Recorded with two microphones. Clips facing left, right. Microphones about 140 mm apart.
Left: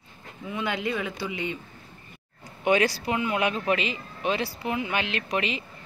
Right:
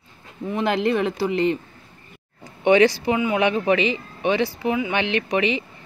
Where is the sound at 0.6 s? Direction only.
60° right (ahead or behind).